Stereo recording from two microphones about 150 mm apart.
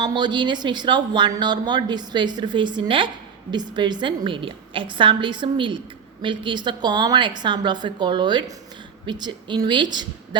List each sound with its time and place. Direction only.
0.0 s a woman's voice: 30° right (ahead or behind)